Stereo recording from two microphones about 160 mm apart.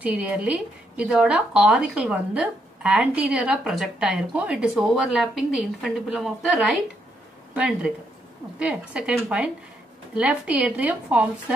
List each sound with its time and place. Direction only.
0.0 s a woman's voice: 10° right (ahead or behind)